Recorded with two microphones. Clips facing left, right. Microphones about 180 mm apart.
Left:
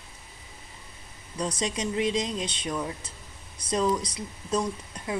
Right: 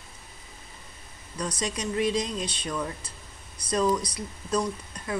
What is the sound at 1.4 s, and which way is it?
Speech, 25° left (ahead or behind).